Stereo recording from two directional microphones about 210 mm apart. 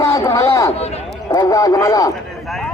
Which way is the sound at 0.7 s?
30° left (ahead or behind).